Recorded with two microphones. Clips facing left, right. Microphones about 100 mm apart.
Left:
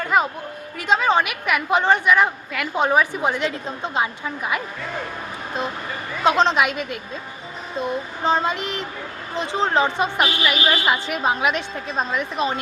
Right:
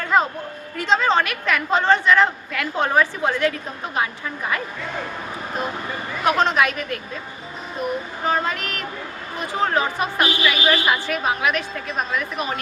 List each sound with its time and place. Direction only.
0.1 s a woman's voice: 10° left (ahead or behind)
6.2 s a woman's voice: 20° left (ahead or behind)
8.2 s a woman's voice: 25° left (ahead or behind)